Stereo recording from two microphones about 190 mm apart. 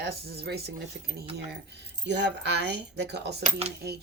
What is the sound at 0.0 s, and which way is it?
Speech, 55° right (ahead or behind).